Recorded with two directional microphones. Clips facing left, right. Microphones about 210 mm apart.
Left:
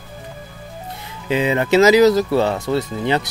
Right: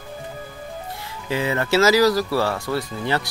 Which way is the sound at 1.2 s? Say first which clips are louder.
Left 5 dB; 20° left (ahead or behind).